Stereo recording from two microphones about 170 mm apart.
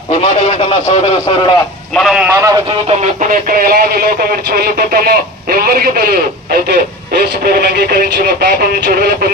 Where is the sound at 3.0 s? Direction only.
50° right (ahead or behind).